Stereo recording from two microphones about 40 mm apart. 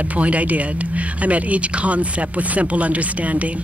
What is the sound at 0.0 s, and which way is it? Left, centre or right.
Speech, right.